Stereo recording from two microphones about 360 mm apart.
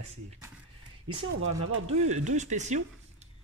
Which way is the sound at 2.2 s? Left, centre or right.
Centre.